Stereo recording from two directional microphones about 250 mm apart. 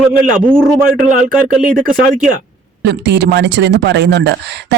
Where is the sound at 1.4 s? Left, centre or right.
Right.